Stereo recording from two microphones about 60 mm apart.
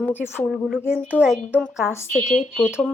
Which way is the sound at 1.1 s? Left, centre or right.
Centre.